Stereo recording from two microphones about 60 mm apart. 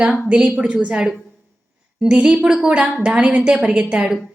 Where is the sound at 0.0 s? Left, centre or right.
Centre.